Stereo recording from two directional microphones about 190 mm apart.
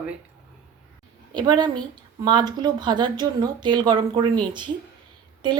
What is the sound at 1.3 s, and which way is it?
Speech, 25° right (ahead or behind).